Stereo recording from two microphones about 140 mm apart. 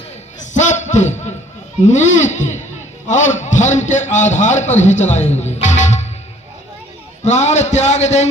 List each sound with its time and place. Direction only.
0.5 s a sound: 60° left (ahead or behind)
1.8 s a man's voice: 60° left (ahead or behind)
7.3 s a man's voice: 55° left (ahead or behind)